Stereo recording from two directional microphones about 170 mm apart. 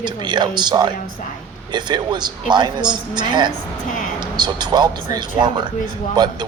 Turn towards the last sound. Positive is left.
turn(degrees=-25)  # may be behind; listen again after turning